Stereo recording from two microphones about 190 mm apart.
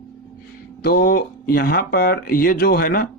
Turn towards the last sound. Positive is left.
turn(degrees=50)  # may be behind; listen again after turning